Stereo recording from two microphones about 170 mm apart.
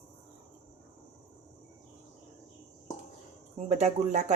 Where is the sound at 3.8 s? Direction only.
45° right (ahead or behind).